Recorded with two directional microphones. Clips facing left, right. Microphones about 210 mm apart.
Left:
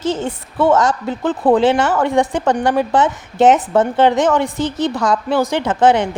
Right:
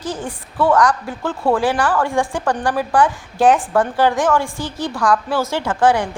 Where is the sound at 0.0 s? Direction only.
25° left (ahead or behind).